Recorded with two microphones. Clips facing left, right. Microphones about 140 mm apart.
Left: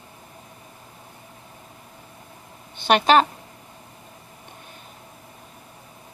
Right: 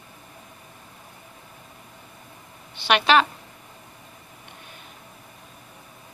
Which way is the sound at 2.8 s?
45° left (ahead or behind).